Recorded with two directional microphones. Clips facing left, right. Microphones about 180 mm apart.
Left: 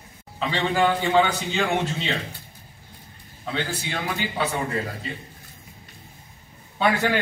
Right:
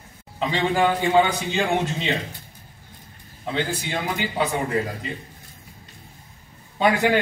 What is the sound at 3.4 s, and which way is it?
Speech, 15° right (ahead or behind).